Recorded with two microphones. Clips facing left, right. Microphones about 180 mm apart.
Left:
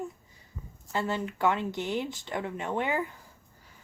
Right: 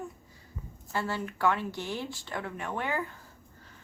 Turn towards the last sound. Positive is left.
turn(degrees=20)  # may be behind; listen again after turning